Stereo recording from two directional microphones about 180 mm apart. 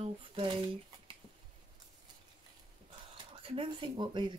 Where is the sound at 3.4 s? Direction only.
30° right (ahead or behind).